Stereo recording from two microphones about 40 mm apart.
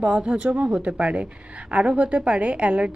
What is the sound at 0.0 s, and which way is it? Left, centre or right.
A woman's voice, right.